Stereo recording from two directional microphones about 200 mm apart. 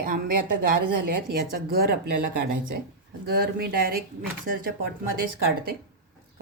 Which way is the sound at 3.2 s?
50° right (ahead or behind).